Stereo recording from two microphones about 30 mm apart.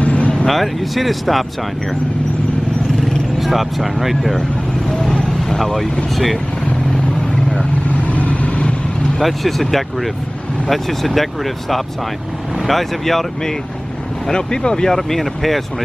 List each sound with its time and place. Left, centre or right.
0.0 s vehicle: left
0.5 s speech: centre
3.3 s speech: centre
4.4 s vehicle: left
5.4 s vehicle: centre
7.8 s vehicle: left
9.2 s speech: centre
12.5 s speech: centre
14.2 s speech: left
14.9 s speech: centre